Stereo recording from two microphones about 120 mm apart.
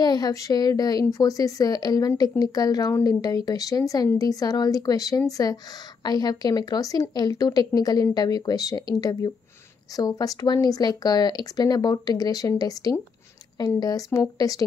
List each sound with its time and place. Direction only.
0.0 s a woman's voice: 35° left (ahead or behind)